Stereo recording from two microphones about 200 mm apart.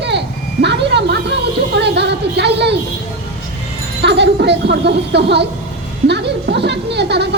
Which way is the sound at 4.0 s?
60° right (ahead or behind).